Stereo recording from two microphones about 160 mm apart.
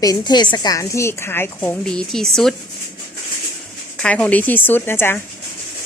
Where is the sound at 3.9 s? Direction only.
5° left (ahead or behind).